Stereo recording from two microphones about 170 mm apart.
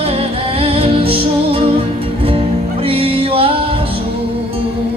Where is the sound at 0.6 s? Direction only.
35° right (ahead or behind).